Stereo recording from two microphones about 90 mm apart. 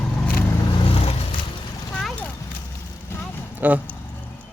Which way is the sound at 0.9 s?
90° left.